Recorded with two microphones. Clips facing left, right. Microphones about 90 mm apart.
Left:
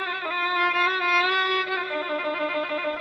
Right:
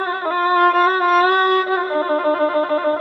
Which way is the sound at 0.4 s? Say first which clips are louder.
Right 10 dB; 45° right (ahead or behind).